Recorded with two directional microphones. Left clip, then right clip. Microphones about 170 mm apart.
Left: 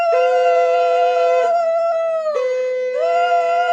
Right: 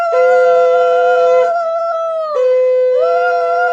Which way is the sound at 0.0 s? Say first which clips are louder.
Right 4 dB; 10° left (ahead or behind).